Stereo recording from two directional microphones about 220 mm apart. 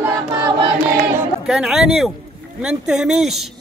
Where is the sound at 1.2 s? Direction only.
Centre (ahead or behind).